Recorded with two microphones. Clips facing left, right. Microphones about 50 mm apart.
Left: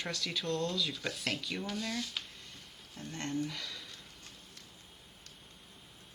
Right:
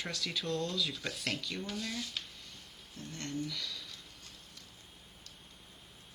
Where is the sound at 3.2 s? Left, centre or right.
Left.